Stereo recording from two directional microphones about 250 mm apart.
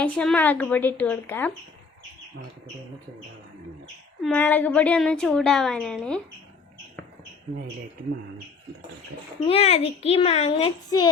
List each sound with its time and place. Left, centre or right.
0.0 s a woman's voice: centre
4.2 s a woman's voice: centre
9.5 s a child's voice: left